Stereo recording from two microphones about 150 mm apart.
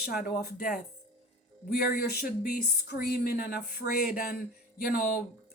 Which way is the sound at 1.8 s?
90° left.